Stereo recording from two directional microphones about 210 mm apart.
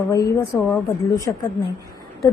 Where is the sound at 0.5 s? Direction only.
Centre (ahead or behind).